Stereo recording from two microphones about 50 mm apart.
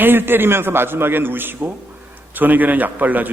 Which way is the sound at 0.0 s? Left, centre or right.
Right.